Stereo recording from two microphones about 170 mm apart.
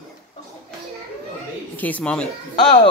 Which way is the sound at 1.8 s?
10° left (ahead or behind).